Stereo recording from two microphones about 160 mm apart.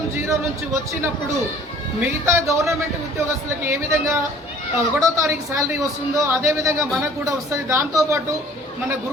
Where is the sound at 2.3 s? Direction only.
20° right (ahead or behind).